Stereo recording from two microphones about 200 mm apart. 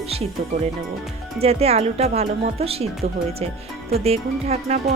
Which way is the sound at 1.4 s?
30° right (ahead or behind).